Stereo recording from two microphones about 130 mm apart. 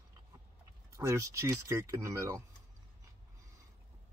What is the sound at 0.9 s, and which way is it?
Speech, 25° right (ahead or behind).